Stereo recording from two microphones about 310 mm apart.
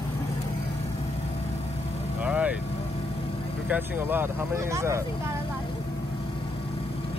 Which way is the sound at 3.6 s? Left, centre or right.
Centre.